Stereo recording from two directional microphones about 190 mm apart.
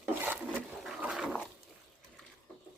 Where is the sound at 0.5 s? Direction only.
5° right (ahead or behind).